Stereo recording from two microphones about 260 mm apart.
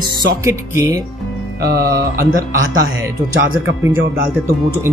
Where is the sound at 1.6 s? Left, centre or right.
Right.